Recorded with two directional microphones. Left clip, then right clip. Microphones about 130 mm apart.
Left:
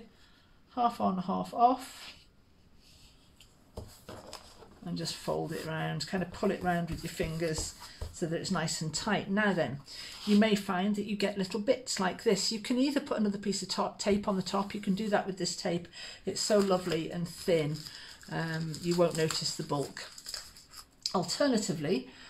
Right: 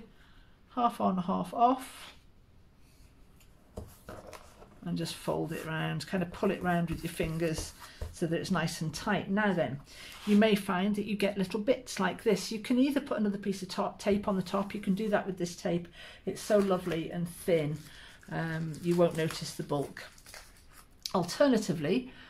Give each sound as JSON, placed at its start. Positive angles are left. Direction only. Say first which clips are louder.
{"t": 0.7, "sound": "speech", "louder": "even", "side_deg": -30}
{"t": 4.8, "sound": "speech", "louder": "even", "side_deg": -25}
{"t": 8.9, "sound": "speech", "louder": "even", "side_deg": -10}
{"t": 10.2, "sound": "speech", "louder": "right 1 dB", "side_deg": -25}
{"t": 21.0, "sound": "speech", "louder": "right 2 dB", "side_deg": -30}